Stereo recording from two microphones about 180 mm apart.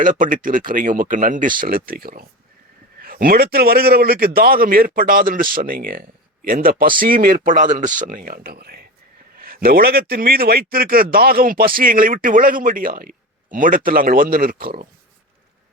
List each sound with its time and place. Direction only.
0.0 s speech: 50° right (ahead or behind)